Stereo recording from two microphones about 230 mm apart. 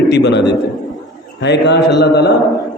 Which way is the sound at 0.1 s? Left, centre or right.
Left.